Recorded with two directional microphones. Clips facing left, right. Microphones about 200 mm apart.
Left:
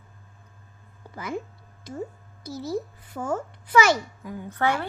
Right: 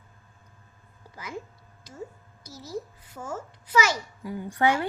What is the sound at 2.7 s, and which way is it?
Speech, 55° left (ahead or behind).